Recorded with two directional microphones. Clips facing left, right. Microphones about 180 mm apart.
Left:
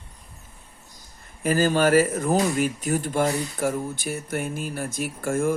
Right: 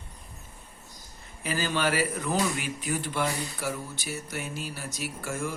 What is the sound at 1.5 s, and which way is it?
Speech, 45° left (ahead or behind).